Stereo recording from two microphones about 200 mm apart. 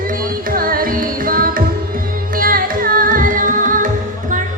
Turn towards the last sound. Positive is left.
turn(degrees=-40)  # may be behind; listen again after turning